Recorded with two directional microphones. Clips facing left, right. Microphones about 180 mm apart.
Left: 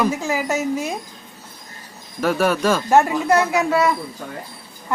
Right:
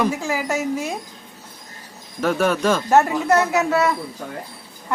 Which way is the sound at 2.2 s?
5° left (ahead or behind).